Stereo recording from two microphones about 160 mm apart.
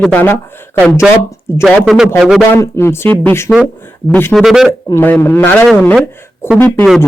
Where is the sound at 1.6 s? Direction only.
Centre (ahead or behind).